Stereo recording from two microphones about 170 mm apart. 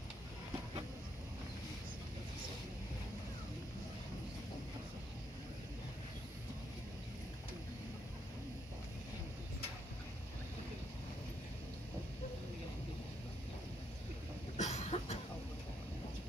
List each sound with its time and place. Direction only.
14.6 s cough: 40° left (ahead or behind)